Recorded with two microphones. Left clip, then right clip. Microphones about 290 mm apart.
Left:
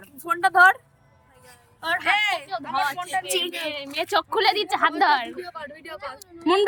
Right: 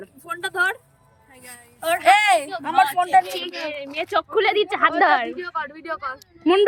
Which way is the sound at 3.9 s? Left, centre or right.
Centre.